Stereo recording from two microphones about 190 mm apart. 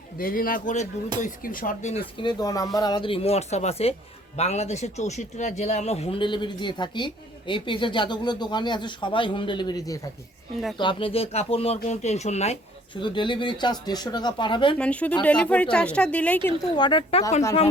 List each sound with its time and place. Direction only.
0.2 s speech: 50° left (ahead or behind)
13.0 s speech: 25° left (ahead or behind)
14.8 s speech: 5° left (ahead or behind)
16.7 s speech: 25° left (ahead or behind)